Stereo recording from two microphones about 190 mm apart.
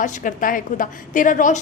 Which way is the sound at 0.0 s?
40° left (ahead or behind).